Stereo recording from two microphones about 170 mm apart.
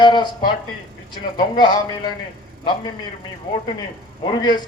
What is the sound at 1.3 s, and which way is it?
A man's voice, 25° left (ahead or behind).